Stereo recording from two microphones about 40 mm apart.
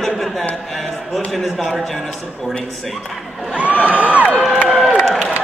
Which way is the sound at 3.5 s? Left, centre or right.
Right.